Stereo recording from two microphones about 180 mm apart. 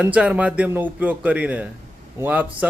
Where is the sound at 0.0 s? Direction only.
5° right (ahead or behind).